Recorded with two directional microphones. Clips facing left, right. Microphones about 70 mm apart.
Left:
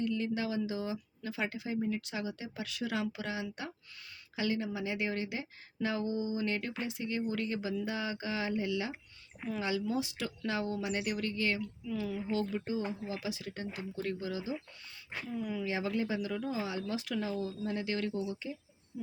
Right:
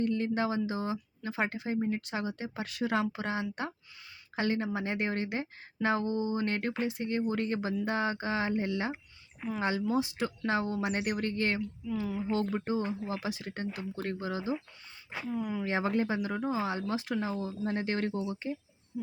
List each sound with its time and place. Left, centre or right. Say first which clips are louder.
0.0 s a woman's voice: right 4 dB; right
11.9 s speech: right 3 dB; right
12.4 s a woman's voice: right 3 dB; right
15.6 s a woman's voice: right 5 dB; right